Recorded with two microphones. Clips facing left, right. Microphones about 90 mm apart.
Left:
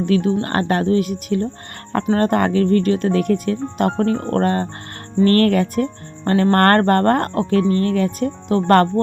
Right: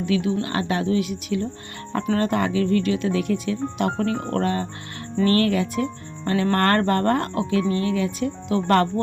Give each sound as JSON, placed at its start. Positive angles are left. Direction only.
{"t": 0.0, "sound": "speech", "side_deg": 45}